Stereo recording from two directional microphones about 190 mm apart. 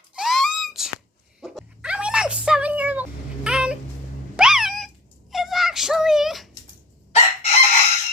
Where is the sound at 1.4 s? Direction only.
5° right (ahead or behind).